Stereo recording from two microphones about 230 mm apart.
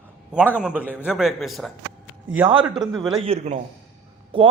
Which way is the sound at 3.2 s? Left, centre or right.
Right.